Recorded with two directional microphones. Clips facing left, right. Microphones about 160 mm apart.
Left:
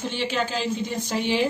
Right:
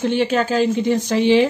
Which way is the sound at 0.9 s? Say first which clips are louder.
Right 10 dB; 90° right.